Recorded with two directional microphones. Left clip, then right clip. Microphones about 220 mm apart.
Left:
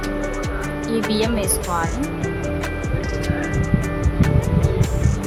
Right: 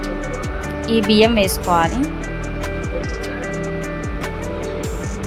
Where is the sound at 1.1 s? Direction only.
15° right (ahead or behind).